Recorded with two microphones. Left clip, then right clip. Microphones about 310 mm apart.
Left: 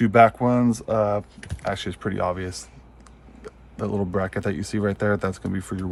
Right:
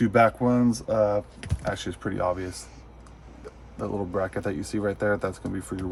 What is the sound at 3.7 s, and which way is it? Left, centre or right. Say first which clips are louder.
Speech: left 2 dB; left.